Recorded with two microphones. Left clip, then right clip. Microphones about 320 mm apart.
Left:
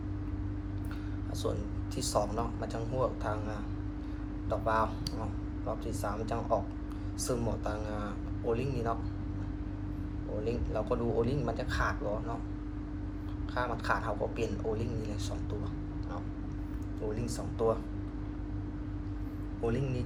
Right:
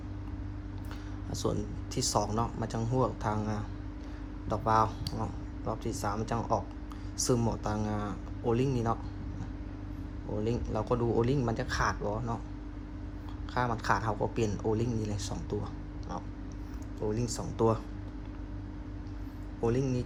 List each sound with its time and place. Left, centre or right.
2.0 s speech: right
10.4 s speech: right
13.5 s speech: right
17.2 s speech: right
19.6 s speech: centre